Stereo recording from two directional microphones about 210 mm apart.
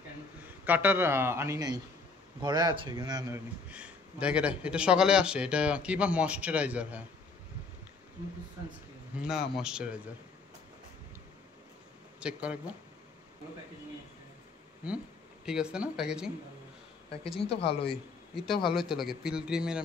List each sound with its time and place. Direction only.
0.7 s speech: 10° right (ahead or behind)
9.3 s speech: 5° right (ahead or behind)
12.2 s speech: 5° right (ahead or behind)
15.4 s speech: 5° right (ahead or behind)
17.4 s speech: 25° left (ahead or behind)
17.8 s speech: centre (ahead or behind)